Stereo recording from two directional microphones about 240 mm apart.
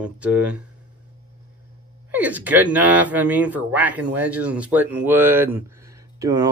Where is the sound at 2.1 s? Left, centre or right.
Centre.